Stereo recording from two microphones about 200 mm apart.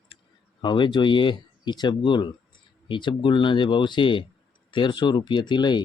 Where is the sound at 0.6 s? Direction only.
25° left (ahead or behind).